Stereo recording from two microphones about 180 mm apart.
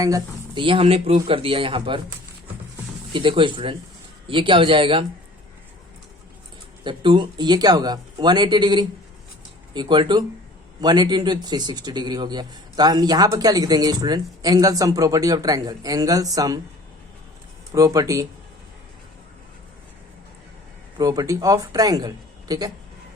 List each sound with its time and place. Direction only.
0.0 s speech: 25° right (ahead or behind)
3.1 s speech: 25° right (ahead or behind)
6.8 s speech: 25° right (ahead or behind)
17.7 s speech: 20° right (ahead or behind)
21.0 s speech: 20° right (ahead or behind)